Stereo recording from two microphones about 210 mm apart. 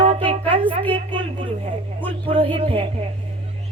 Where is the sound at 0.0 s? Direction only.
25° right (ahead or behind).